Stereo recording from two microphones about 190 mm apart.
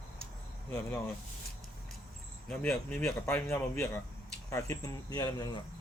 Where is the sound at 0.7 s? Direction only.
10° left (ahead or behind).